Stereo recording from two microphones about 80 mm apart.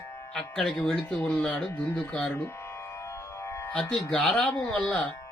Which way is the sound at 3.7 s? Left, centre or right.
Centre.